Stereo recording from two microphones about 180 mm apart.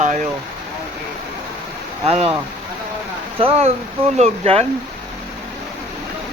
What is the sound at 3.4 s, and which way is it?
Speech, 35° right (ahead or behind).